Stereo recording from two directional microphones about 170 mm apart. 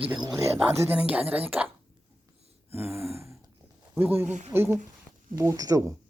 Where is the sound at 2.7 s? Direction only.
15° right (ahead or behind).